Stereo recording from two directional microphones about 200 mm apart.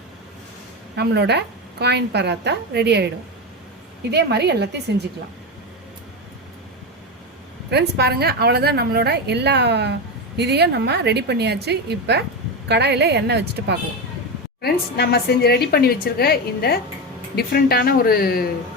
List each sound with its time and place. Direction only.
0.9 s a woman's voice: 55° right (ahead or behind)
4.1 s a woman's voice: 55° right (ahead or behind)
7.7 s a woman's voice: 55° right (ahead or behind)
14.6 s a woman's voice: 50° left (ahead or behind)